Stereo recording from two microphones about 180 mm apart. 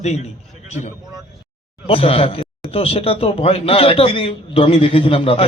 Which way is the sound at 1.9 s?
30° left (ahead or behind).